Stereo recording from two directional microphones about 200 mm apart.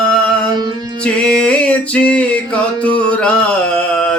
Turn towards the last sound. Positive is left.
turn(degrees=5)  # may be behind; listen again after turning